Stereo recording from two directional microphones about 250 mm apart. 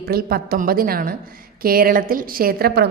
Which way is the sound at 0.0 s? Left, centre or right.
Right.